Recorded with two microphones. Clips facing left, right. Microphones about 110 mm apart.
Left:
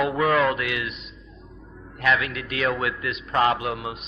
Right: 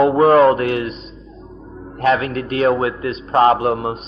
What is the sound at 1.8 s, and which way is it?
A man's voice, 35° right (ahead or behind).